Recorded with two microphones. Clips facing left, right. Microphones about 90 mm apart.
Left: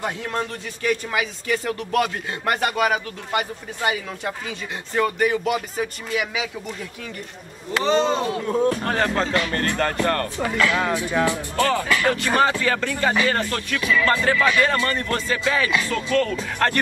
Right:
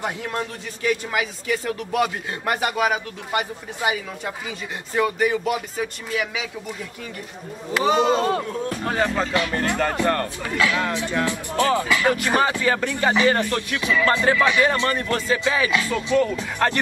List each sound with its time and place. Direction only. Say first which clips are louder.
0.0 s speech: left 1 dB; 5° right (ahead or behind)
7.7 s speech: right 1 dB; 10° right (ahead or behind)
10.7 s speech: left 2 dB; 5° left (ahead or behind)
11.5 s speech: right 3 dB; 15° right (ahead or behind)